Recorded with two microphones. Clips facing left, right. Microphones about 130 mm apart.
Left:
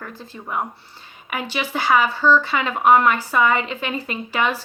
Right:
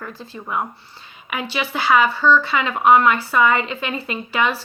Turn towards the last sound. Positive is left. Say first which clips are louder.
# right 1 dB
turn(degrees=45)  # may be behind; listen again after turning